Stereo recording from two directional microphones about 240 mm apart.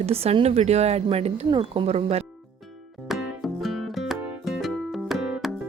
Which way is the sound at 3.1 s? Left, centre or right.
Centre.